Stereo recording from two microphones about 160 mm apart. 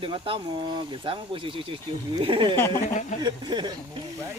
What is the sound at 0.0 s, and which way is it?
Speech, 35° right (ahead or behind).